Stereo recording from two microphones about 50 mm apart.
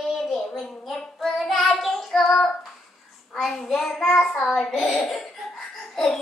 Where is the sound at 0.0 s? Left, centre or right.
Centre.